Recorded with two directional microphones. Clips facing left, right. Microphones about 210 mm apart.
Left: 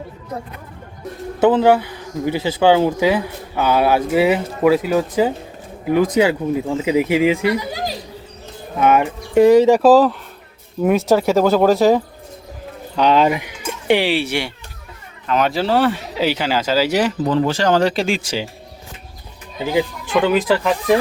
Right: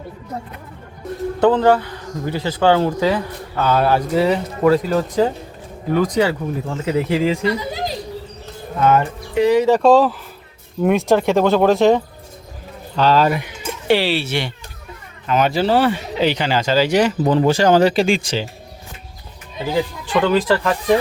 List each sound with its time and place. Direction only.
1.4 s speech: 10° left (ahead or behind)
8.8 s speech: 10° left (ahead or behind)
9.3 s speech: 45° left (ahead or behind)
9.6 s speech: 5° left (ahead or behind)
13.0 s speech: 15° left (ahead or behind)
15.3 s speech: centre (ahead or behind)
17.2 s speech: 15° right (ahead or behind); by 18.4 s 10° left (ahead or behind)
19.7 s speech: 5° left (ahead or behind)